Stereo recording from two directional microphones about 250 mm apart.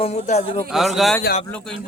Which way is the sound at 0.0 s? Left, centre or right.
Left.